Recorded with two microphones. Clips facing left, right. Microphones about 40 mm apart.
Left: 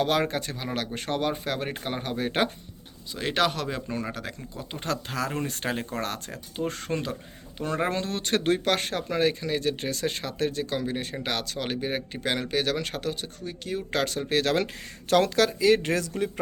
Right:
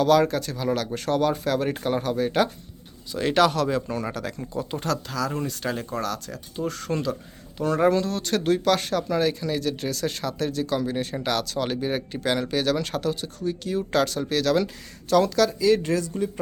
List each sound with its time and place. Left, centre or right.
0.0 s speech: left
2.1 s speech: left
3.1 s speech: centre
5.0 s speech: left
6.6 s speech: left
7.6 s speech: centre
7.9 s speech: left